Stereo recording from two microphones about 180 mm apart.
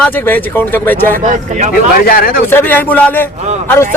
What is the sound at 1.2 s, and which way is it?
Speech, 45° right (ahead or behind).